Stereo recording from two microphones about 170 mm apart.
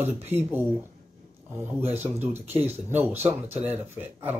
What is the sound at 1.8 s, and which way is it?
Speech, 40° right (ahead or behind).